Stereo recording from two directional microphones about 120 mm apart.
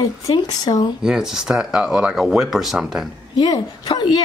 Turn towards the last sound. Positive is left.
turn(degrees=35)  # may be behind; listen again after turning